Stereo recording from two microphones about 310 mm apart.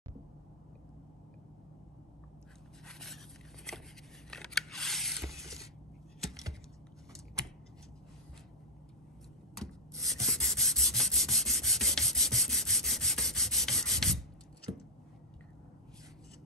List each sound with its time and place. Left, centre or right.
2.9 s scrape: centre
4.3 s scissors: centre
5.3 s a sound: centre
9.6 s rub: centre